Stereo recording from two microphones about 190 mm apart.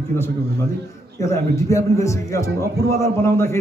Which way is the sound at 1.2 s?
15° left (ahead or behind).